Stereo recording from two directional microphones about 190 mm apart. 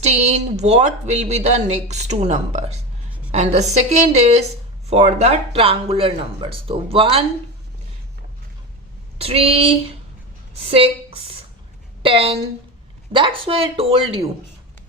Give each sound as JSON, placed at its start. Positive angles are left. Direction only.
{"t": 0.0, "sound": "speech", "side_deg": -35}
{"t": 9.1, "sound": "speech", "side_deg": -30}